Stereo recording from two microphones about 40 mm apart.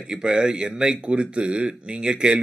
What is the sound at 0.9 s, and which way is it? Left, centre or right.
A man's voice, right.